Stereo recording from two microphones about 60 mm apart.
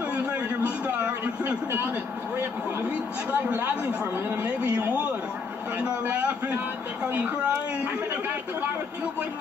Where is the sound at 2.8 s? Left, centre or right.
Right.